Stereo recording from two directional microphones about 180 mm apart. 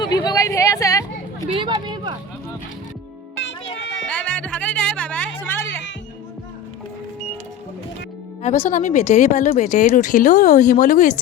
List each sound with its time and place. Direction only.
0.0 s a sound: 20° left (ahead or behind)
1.5 s speech: 25° right (ahead or behind)
3.8 s music: 90° left
4.1 s music: 5° left (ahead or behind)
8.5 s speech: 50° left (ahead or behind)